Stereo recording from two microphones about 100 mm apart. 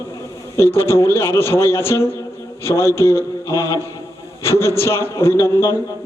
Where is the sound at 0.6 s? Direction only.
25° left (ahead or behind).